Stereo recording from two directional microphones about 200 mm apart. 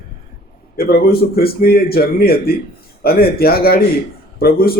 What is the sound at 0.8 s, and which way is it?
A man's voice, 50° left (ahead or behind).